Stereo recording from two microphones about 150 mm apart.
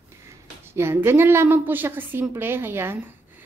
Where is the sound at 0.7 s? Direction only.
15° right (ahead or behind).